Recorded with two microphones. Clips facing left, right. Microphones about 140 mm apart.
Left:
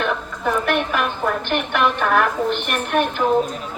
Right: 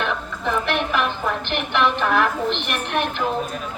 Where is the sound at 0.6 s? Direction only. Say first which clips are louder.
Left 1 dB; 45° left (ahead or behind).